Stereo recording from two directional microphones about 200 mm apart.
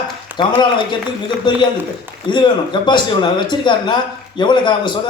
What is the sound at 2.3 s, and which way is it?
Speech, 25° left (ahead or behind).